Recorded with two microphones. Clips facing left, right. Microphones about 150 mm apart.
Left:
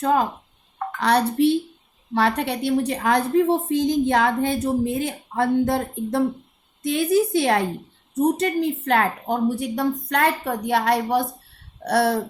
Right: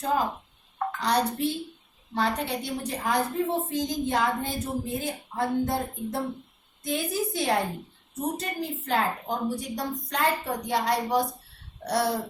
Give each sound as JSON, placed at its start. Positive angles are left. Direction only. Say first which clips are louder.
{"t": 0.9, "sound": "a woman's voice", "louder": "left 7 dB", "side_deg": 70}